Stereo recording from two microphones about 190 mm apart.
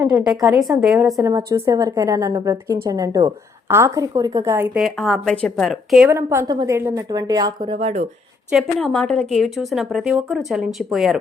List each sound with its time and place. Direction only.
0.0 s speech: 5° right (ahead or behind)
1.2 s a woman's voice: 15° right (ahead or behind)
4.8 s speech: centre (ahead or behind)
6.1 s a woman's voice: 20° right (ahead or behind)
8.4 s speech: centre (ahead or behind)